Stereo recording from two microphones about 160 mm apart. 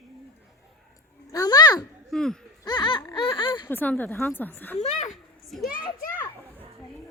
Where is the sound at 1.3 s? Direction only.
25° left (ahead or behind).